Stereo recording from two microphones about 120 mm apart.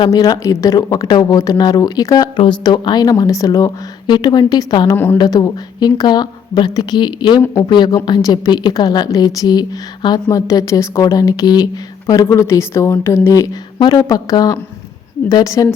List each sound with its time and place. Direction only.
0.0 s a woman's voice: 30° left (ahead or behind)